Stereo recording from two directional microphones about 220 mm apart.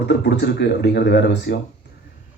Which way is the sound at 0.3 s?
50° left (ahead or behind).